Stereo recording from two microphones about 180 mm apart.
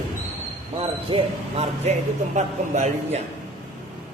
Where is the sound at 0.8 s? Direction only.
30° right (ahead or behind).